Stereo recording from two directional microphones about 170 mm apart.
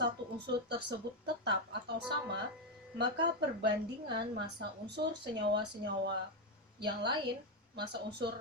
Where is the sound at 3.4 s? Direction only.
85° right.